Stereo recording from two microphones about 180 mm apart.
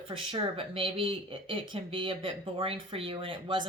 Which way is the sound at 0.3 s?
30° right (ahead or behind).